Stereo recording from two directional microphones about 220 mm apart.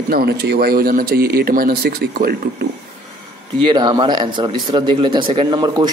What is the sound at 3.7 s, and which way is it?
Speech, 20° right (ahead or behind).